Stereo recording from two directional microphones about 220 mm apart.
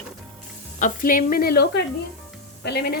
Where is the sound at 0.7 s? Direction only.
35° left (ahead or behind).